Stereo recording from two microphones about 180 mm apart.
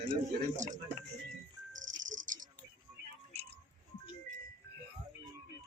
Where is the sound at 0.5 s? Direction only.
45° right (ahead or behind).